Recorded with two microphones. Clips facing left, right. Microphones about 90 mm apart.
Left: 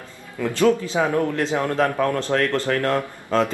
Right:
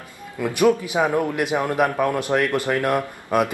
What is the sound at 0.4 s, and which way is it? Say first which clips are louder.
A man's voice: even; 15° right (ahead or behind).